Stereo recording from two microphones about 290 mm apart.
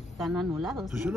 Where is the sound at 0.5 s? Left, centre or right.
Centre.